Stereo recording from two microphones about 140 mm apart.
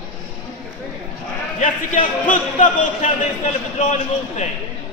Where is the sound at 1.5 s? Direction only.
65° left (ahead or behind).